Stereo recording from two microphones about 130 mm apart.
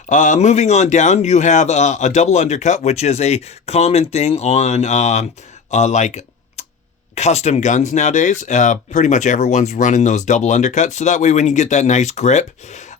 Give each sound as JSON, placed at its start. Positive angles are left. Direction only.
{"t": 0.1, "sound": "speech", "side_deg": 70}
{"t": 5.7, "sound": "a sound", "side_deg": 65}
{"t": 7.2, "sound": "speech", "side_deg": 60}